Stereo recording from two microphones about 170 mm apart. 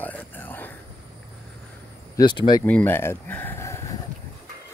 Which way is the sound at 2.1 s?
25° left (ahead or behind).